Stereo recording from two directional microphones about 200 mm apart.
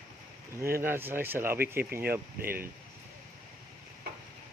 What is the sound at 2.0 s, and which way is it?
Speech, 50° right (ahead or behind).